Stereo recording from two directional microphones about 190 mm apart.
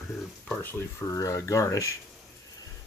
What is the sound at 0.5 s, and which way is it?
Speech, 10° left (ahead or behind).